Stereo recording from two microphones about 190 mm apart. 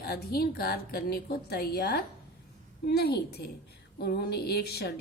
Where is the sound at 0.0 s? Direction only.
55° left (ahead or behind).